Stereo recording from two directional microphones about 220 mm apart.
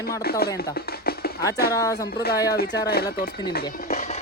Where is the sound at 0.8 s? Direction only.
45° left (ahead or behind).